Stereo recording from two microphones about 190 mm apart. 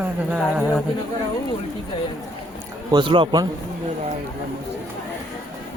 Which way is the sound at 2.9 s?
25° right (ahead or behind).